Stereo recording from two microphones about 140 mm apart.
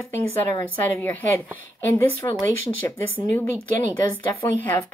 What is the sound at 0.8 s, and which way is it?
A woman's voice, 20° left (ahead or behind).